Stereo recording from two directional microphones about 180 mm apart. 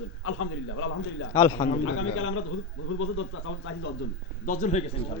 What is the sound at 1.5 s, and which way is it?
Speech, 45° left (ahead or behind).